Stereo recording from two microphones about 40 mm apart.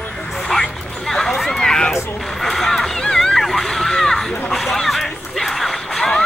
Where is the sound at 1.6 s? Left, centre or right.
Centre.